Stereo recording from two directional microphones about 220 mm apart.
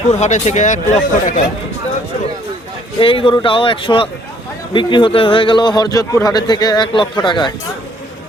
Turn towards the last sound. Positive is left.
turn(degrees=20)  # may be behind; listen again after turning